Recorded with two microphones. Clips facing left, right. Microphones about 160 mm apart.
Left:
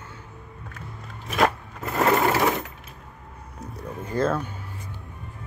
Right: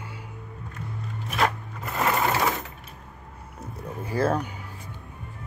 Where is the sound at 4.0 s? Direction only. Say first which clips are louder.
Even; 10° right (ahead or behind).